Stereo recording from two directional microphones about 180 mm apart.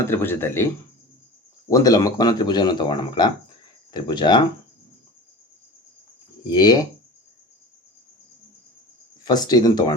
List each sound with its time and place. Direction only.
0.0 s speech: 15° left (ahead or behind)
1.7 s speech: 20° left (ahead or behind)
6.5 s speech: 20° left (ahead or behind)
9.2 s speech: 20° left (ahead or behind)